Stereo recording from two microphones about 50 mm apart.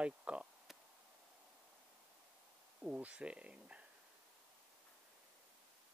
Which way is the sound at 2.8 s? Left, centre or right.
Right.